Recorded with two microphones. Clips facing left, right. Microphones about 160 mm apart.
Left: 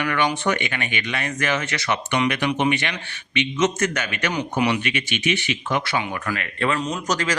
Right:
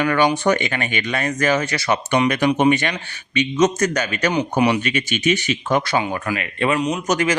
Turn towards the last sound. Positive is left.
turn(degrees=-25)  # may be behind; listen again after turning